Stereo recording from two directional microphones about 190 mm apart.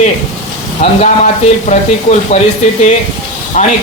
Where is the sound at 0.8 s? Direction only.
40° left (ahead or behind).